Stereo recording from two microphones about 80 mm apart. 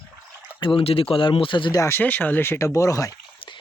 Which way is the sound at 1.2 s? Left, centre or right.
Left.